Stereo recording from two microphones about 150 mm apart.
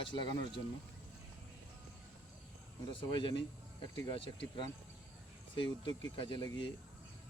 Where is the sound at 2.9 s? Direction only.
30° left (ahead or behind).